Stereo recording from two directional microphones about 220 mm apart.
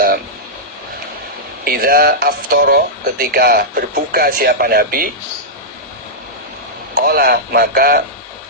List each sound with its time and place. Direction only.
1.6 s speech: 40° right (ahead or behind)
6.9 s speech: 45° right (ahead or behind)